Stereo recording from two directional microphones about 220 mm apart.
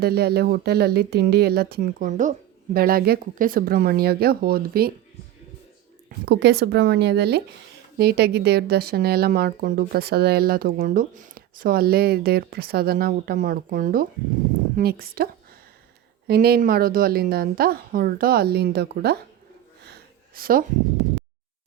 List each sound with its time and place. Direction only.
0.0 s a woman's voice: 45° right (ahead or behind)
6.1 s a woman's voice: 50° right (ahead or behind)
19.8 s a sound: 45° right (ahead or behind)